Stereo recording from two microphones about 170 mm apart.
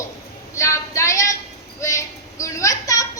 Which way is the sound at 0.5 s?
15° left (ahead or behind).